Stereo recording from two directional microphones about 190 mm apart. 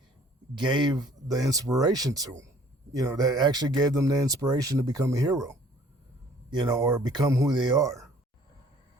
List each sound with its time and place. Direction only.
0.5 s speech: 25° right (ahead or behind)